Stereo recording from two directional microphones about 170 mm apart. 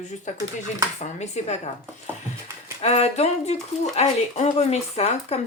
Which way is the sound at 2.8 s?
40° left (ahead or behind).